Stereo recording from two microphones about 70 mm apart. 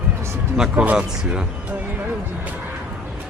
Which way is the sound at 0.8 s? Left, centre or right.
Centre.